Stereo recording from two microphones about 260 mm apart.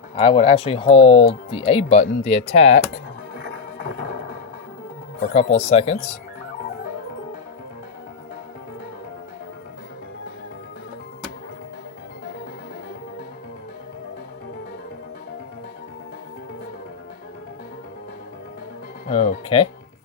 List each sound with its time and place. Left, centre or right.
0.2 s speech: left
2.2 s music: left
5.2 s speech: left
19.0 s speech: left